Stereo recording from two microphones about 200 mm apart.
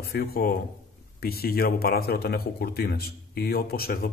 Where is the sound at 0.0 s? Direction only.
50° left (ahead or behind).